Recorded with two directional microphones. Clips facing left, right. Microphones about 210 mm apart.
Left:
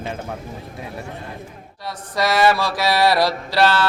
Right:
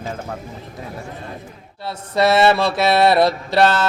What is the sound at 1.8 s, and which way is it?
Mantra, 25° right (ahead or behind).